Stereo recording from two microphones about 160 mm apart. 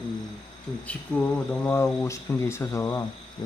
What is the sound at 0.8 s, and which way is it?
Speech, 10° left (ahead or behind).